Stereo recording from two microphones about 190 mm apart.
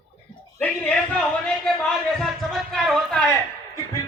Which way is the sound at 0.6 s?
5° left (ahead or behind).